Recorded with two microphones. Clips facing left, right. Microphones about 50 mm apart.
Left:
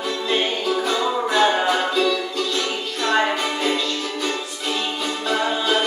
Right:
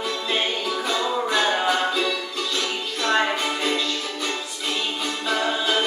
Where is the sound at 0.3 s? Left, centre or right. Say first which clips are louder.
Left 4 dB; centre.